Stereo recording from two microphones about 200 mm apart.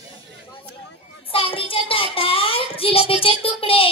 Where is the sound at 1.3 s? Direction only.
25° left (ahead or behind).